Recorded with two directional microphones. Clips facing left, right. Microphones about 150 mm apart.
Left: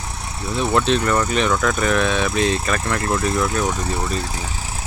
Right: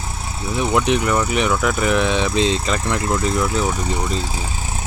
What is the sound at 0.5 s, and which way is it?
Speech, 15° right (ahead or behind).